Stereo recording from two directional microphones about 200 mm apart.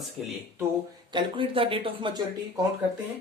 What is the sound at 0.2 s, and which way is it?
Speech, centre (ahead or behind).